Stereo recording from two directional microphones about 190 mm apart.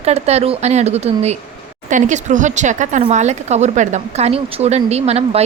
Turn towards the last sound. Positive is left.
turn(degrees=-35)  # may be behind; listen again after turning